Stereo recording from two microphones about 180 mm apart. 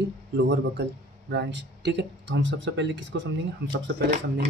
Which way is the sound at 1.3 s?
70° right (ahead or behind).